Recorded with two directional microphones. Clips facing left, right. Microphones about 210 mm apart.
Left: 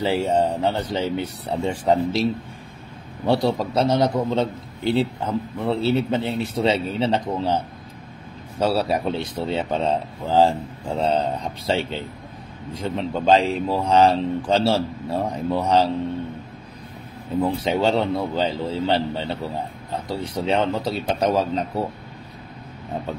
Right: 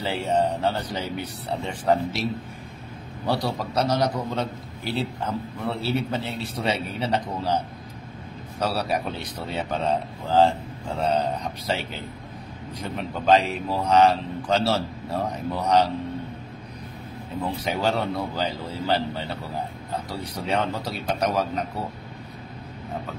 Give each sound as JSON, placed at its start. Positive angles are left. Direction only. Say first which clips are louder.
{"t": 0.0, "sound": "speech", "louder": "left 4 dB", "side_deg": 25}
{"t": 3.3, "sound": "speech", "louder": "left 6 dB", "side_deg": 25}
{"t": 8.5, "sound": "speech", "louder": "left 5 dB", "side_deg": 25}
{"t": 17.6, "sound": "speech", "louder": "left 2 dB", "side_deg": 25}